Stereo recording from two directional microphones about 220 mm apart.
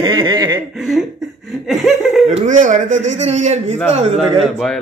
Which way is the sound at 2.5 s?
35° right (ahead or behind).